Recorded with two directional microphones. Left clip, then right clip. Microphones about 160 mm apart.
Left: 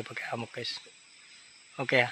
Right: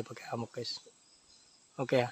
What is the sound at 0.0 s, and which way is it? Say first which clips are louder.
Speech: left 4 dB; 25° right (ahead or behind).